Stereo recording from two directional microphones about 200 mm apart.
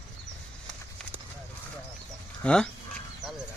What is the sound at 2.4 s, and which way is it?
Speech, 5° left (ahead or behind).